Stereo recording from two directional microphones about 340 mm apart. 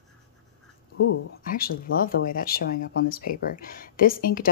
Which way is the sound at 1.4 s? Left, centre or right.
Left.